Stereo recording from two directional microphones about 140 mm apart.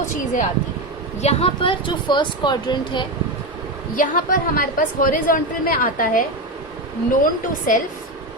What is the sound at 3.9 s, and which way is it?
A woman's voice, 75° left (ahead or behind).